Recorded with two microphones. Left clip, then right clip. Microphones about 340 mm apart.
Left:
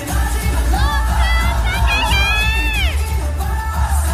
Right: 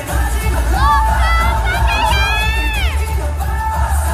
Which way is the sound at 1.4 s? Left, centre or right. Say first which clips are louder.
Right 4 dB; centre.